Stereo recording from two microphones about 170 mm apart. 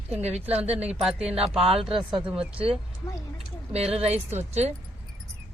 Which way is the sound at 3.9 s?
40° right (ahead or behind).